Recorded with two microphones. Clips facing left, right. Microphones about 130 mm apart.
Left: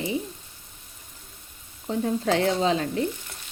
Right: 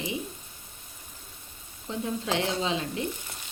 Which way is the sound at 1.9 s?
40° left (ahead or behind).